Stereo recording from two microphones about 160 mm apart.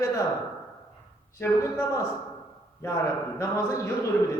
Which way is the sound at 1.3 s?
15° left (ahead or behind).